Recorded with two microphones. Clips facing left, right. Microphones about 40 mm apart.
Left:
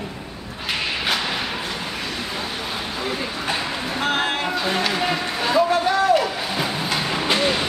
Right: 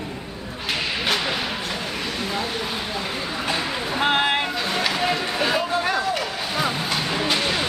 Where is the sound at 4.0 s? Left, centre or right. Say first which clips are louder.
Right 3 dB; right.